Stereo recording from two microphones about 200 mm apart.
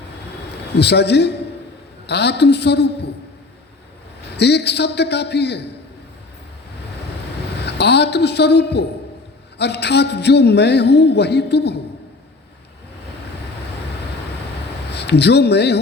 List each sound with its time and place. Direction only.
0.7 s speech: 55° left (ahead or behind)
4.4 s speech: 55° left (ahead or behind)
7.6 s speech: 55° left (ahead or behind)
14.8 s speech: 55° left (ahead or behind)